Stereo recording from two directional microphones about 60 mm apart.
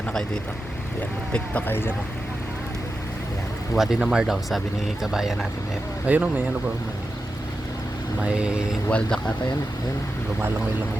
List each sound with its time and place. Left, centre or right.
1.6 s speech: left
3.8 s speech: centre
6.1 s speech: right
8.9 s speech: centre